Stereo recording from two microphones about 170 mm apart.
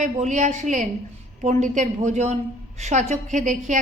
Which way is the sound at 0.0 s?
45° right (ahead or behind).